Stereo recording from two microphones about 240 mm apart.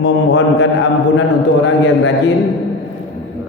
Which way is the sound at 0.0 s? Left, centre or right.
Left.